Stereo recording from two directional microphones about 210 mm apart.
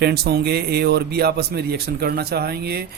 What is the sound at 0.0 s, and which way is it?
A man's voice, 50° right (ahead or behind).